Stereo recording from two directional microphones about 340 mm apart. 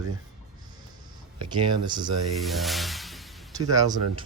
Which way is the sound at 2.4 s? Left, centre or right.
Centre.